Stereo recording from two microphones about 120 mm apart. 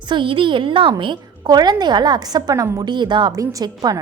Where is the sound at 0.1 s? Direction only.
45° right (ahead or behind).